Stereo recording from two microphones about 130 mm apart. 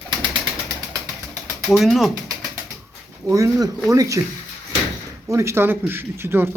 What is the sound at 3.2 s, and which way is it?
Speech, 25° right (ahead or behind).